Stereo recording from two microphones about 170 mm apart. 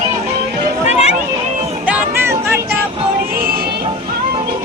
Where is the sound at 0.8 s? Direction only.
40° left (ahead or behind).